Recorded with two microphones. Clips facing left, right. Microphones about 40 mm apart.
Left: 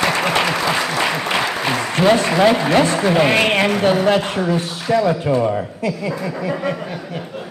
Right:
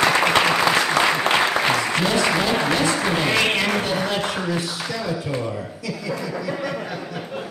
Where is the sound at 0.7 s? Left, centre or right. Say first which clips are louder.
Right 1 dB; centre.